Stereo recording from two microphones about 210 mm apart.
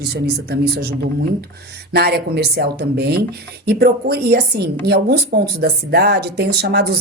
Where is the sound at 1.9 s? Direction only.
50° right (ahead or behind).